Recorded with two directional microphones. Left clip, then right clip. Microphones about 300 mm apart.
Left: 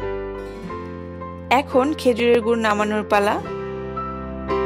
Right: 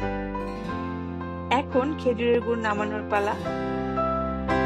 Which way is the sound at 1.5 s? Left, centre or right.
Left.